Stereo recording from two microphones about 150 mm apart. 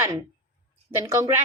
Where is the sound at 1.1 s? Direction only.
15° right (ahead or behind).